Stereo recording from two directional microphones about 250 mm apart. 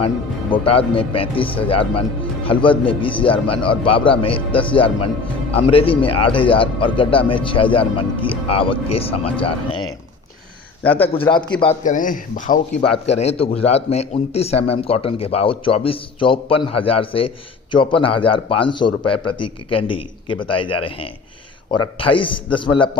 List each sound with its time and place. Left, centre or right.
0.5 s a man's voice: left
11.1 s a man's voice: centre